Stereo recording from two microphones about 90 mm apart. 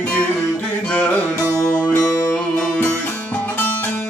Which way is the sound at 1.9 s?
35° left (ahead or behind).